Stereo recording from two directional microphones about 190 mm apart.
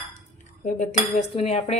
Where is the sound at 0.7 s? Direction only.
40° left (ahead or behind).